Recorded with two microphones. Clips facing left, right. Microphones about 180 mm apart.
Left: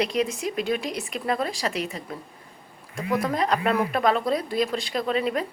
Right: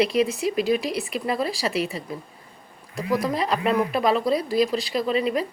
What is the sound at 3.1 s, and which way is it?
Speech, 5° right (ahead or behind).